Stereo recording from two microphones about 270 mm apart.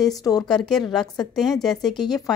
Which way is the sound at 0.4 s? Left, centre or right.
Centre.